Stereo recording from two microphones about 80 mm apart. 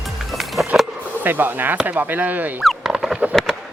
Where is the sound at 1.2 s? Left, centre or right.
Right.